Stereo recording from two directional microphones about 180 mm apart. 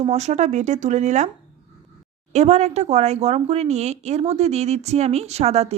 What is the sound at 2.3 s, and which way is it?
Speech, 40° right (ahead or behind).